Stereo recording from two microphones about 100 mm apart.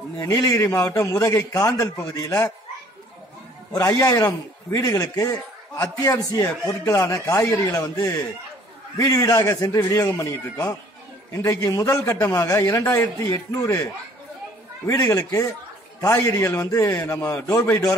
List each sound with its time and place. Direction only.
0.2 s a man's voice: 30° left (ahead or behind)
3.7 s a man's voice: 35° left (ahead or behind)
14.9 s a man's voice: 35° left (ahead or behind)
17.6 s a man's voice: 15° left (ahead or behind)